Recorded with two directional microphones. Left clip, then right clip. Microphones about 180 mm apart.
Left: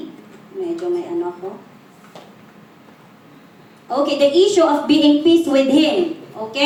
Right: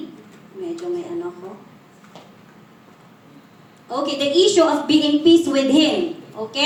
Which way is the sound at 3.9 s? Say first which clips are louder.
Left 5 dB; 45° right (ahead or behind).